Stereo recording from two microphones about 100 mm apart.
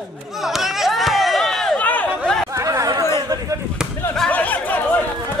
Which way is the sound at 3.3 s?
35° right (ahead or behind).